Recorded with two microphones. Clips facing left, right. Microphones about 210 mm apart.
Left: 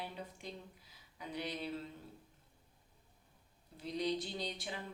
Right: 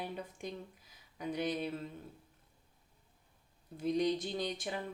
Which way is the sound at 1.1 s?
50° right (ahead or behind).